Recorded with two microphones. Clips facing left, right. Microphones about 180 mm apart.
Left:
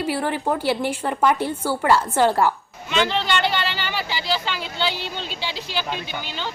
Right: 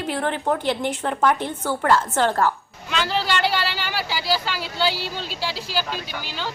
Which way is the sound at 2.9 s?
5° right (ahead or behind).